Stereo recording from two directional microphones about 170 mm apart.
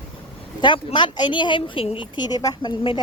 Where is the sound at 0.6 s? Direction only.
30° left (ahead or behind).